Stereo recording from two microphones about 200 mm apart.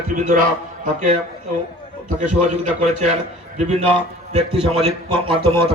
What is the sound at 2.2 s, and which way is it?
A man's voice, 40° right (ahead or behind).